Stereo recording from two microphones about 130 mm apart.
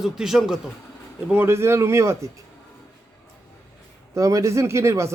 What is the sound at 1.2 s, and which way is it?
Speech, 15° right (ahead or behind).